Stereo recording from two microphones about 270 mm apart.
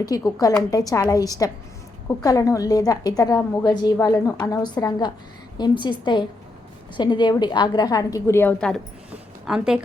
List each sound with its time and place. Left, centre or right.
0.0 s a woman's voice: centre
6.9 s a woman's voice: centre